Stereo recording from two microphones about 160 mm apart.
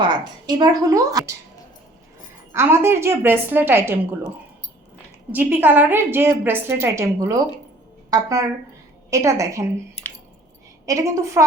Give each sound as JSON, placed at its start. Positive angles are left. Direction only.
{"t": 0.0, "sound": "a woman's voice", "side_deg": -25}
{"t": 2.5, "sound": "a woman's voice", "side_deg": -15}
{"t": 5.3, "sound": "a woman's voice", "side_deg": -10}
{"t": 10.8, "sound": "a woman's voice", "side_deg": -20}